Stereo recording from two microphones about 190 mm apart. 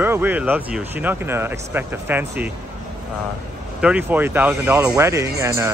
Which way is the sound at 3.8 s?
10° right (ahead or behind).